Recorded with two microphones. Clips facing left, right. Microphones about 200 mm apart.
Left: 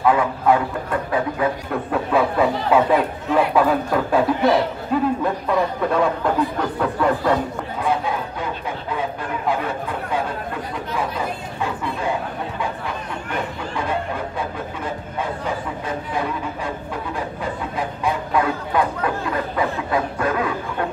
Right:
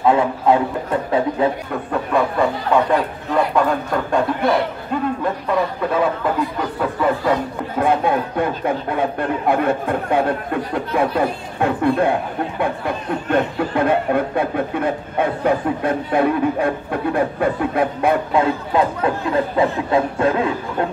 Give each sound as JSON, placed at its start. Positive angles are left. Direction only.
{"t": 0.0, "sound": "speech", "side_deg": -25}
{"t": 1.7, "sound": "speech", "side_deg": 0}
{"t": 7.8, "sound": "speech", "side_deg": -55}
{"t": 18.3, "sound": "speech", "side_deg": -25}